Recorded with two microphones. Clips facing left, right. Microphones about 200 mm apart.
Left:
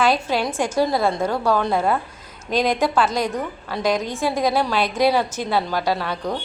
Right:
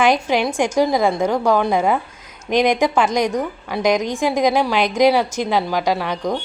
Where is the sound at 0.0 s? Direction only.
15° right (ahead or behind).